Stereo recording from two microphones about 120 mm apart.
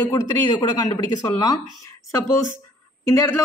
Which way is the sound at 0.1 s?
35° left (ahead or behind).